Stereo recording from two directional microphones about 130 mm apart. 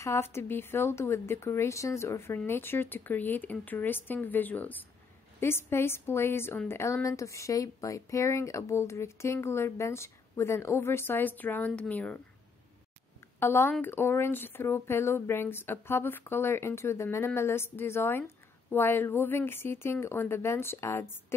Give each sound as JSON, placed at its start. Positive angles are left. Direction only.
{"t": 0.0, "sound": "speech", "side_deg": 20}
{"t": 13.4, "sound": "speech", "side_deg": 20}